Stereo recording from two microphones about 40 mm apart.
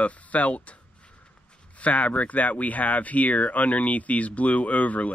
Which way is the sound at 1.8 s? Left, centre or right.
Left.